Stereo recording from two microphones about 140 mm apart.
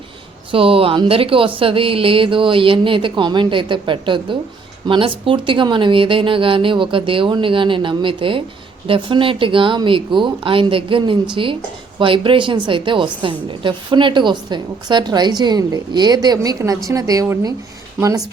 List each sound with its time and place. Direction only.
0.5 s a woman's voice: 40° right (ahead or behind); by 17.5 s 25° right (ahead or behind)